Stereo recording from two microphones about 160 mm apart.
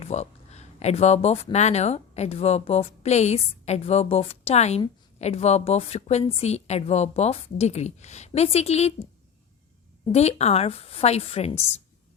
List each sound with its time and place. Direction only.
0.0 s a woman's voice: 45° left (ahead or behind)
10.1 s a woman's voice: 40° left (ahead or behind)